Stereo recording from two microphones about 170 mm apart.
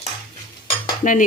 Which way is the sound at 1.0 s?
45° left (ahead or behind).